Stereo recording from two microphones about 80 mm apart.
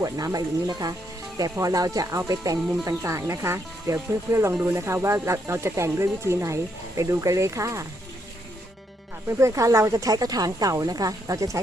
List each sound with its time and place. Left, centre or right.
0.0 s a woman's voice: right
9.4 s a woman's voice: right